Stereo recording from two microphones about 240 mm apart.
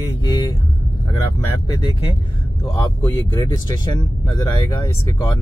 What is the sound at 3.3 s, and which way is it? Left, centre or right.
Speech, centre.